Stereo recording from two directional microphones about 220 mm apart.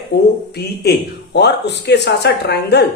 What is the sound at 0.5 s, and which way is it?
Speech, 50° left (ahead or behind).